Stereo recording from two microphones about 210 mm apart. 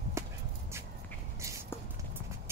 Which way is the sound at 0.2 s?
15° right (ahead or behind).